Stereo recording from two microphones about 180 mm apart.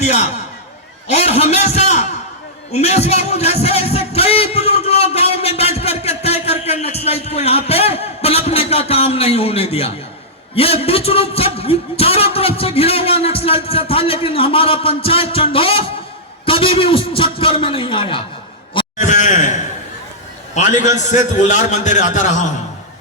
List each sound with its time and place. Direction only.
0.0 s a man's voice: 35° left (ahead or behind)
18.9 s a man's voice: 45° left (ahead or behind)